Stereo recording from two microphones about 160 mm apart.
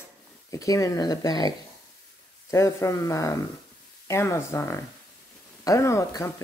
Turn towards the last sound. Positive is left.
turn(degrees=20)  # may be behind; listen again after turning